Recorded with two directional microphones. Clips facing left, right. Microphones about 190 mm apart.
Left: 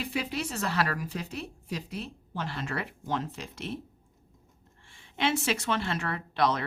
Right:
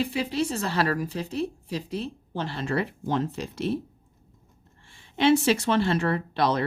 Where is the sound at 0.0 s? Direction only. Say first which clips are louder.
Right 6 dB; 30° right (ahead or behind).